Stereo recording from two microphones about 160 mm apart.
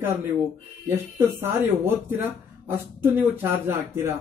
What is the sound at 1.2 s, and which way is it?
Speech, 15° right (ahead or behind).